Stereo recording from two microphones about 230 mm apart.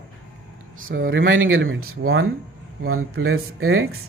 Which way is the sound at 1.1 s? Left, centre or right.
Right.